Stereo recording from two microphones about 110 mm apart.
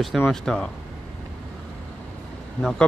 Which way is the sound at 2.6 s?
5° left (ahead or behind).